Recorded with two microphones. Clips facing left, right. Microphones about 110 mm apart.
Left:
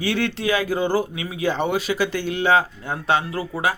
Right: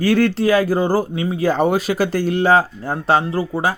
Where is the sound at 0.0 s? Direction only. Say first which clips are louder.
Right 7 dB; 45° right (ahead or behind).